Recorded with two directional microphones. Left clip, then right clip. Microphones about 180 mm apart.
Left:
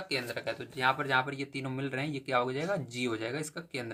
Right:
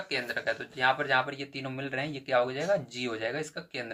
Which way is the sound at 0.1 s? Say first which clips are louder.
Right 4 dB; 30° left (ahead or behind).